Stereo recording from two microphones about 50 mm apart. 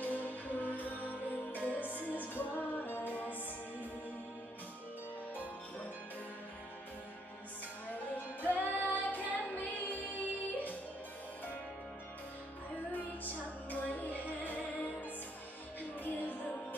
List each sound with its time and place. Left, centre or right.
0.0 s music: left
7.9 s music: left
12.9 s music: left